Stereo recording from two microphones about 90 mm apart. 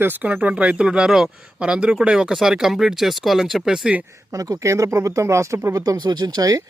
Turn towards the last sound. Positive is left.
turn(degrees=-45)  # may be behind; listen again after turning